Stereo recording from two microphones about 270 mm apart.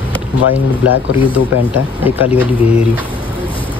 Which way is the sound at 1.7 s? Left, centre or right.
Centre.